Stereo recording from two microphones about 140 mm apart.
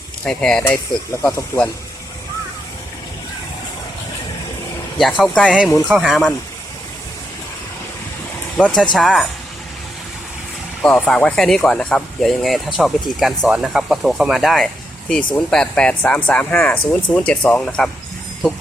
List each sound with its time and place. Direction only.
0.3 s speech: 5° left (ahead or behind)
1.2 s speech: 20° left (ahead or behind)
4.9 s speech: centre (ahead or behind)
5.5 s speech: 5° right (ahead or behind)
8.5 s speech: 5° left (ahead or behind)
10.8 s speech: 5° left (ahead or behind)